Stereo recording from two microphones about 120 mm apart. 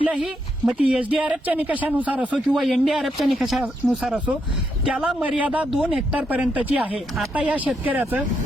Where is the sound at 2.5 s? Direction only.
Centre (ahead or behind).